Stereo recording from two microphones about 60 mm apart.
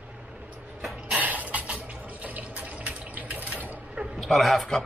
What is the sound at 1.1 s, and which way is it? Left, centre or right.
Water, right.